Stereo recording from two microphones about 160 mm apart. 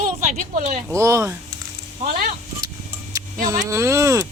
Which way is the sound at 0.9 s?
20° right (ahead or behind).